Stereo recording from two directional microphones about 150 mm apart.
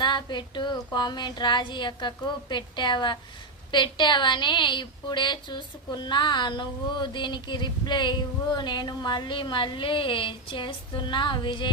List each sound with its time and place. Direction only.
0.0 s child singing: 30° left (ahead or behind)
0.9 s a woman's voice: 30° left (ahead or behind)